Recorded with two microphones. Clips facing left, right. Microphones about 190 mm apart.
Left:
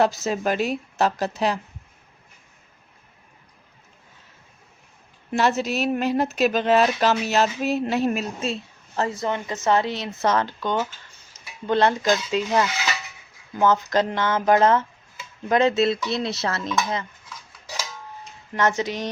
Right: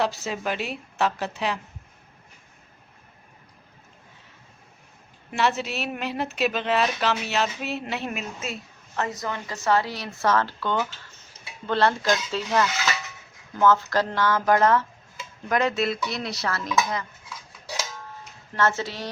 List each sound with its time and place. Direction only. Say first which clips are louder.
0.0 s speech: left 5 dB; 40° left (ahead or behind)
5.3 s speech: left 4 dB; 40° left (ahead or behind); by 16.7 s 25° left (ahead or behind)
18.5 s speech: left 2 dB; 15° left (ahead or behind)